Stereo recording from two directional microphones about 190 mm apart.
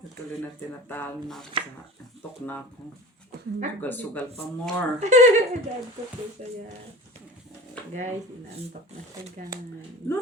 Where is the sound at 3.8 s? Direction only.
10° left (ahead or behind).